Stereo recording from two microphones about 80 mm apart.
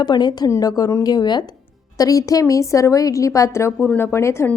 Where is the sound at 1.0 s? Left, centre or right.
Left.